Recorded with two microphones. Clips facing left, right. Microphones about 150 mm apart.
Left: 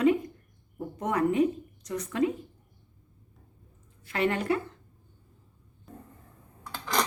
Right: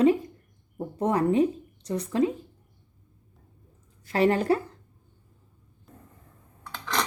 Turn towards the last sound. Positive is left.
turn(degrees=5)  # may be behind; listen again after turning